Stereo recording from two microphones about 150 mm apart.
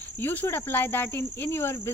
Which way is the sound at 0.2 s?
15° left (ahead or behind).